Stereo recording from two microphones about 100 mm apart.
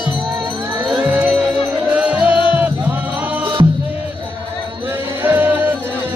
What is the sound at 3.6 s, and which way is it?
Music, 55° right (ahead or behind).